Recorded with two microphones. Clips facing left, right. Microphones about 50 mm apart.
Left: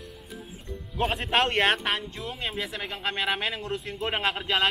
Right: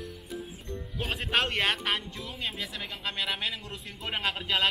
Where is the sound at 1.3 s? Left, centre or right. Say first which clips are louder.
Left 4 dB; left.